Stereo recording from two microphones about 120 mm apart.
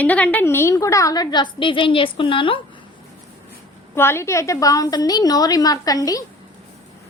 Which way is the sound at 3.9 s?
20° left (ahead or behind).